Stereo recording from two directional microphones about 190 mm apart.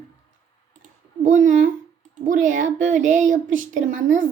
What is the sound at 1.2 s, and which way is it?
A child's voice, 40° right (ahead or behind).